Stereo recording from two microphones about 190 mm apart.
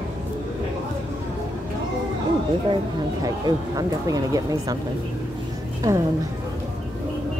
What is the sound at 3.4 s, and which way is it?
Speech, 20° right (ahead or behind).